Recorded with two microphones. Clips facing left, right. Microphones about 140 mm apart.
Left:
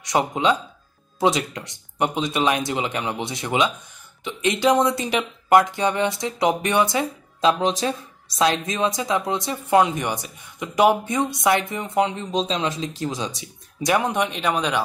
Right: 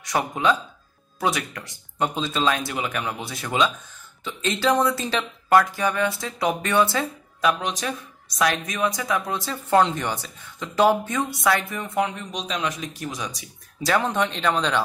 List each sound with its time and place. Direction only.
0.1 s speech: 20° left (ahead or behind)